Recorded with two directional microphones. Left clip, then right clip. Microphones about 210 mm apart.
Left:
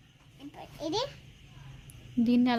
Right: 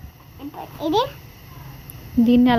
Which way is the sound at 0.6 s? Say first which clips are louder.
Right 12 dB; 15° left (ahead or behind).